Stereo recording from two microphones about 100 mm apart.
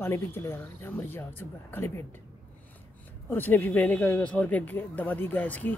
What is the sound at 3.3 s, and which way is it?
Speech, 20° left (ahead or behind).